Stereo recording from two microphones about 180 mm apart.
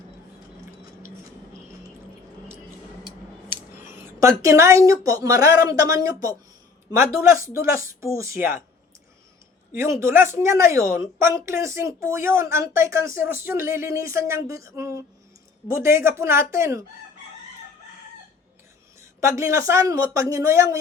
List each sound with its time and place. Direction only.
3.5 s a woman's voice: 15° right (ahead or behind)
9.7 s a woman's voice: 15° right (ahead or behind)
19.2 s a woman's voice: 15° right (ahead or behind)